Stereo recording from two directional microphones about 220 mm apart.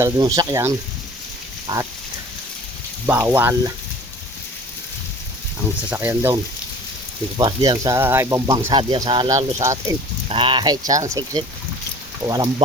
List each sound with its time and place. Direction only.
0.0 s speech: 15° right (ahead or behind)
3.1 s speech: 10° right (ahead or behind)
5.9 s speech: 10° right (ahead or behind)